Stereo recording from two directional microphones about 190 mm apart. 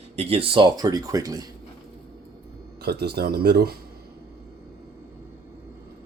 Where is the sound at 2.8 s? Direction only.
60° right (ahead or behind).